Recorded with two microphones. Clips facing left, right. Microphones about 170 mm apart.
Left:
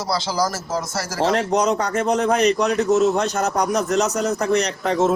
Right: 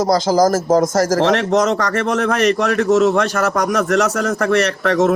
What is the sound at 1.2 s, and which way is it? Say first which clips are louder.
A man's voice: left 2 dB; 90° right.